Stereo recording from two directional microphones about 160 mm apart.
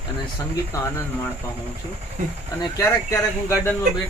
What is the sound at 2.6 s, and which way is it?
Speech, 20° left (ahead or behind).